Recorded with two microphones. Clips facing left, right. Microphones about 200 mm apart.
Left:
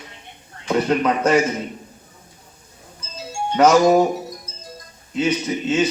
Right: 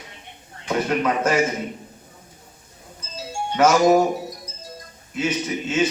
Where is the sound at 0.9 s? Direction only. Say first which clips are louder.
Left 2 dB; 35° left (ahead or behind).